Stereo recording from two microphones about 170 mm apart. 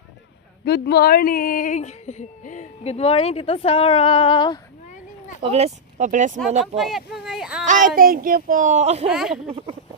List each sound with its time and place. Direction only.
0.6 s speech: 75° left (ahead or behind); by 4.6 s 25° left (ahead or behind)
5.4 s speech: 35° right (ahead or behind)
6.6 s speech: centre (ahead or behind)
7.6 s speech: 50° right (ahead or behind)
9.0 s speech: 5° right (ahead or behind)
9.5 s speech: 35° right (ahead or behind)